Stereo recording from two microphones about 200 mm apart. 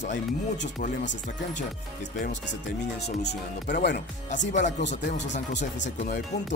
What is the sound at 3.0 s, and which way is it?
Speech, 55° left (ahead or behind).